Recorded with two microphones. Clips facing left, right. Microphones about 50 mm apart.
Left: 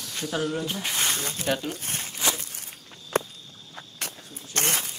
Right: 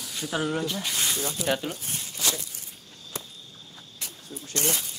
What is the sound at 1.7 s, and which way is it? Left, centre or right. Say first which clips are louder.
Speech: left 2 dB; left.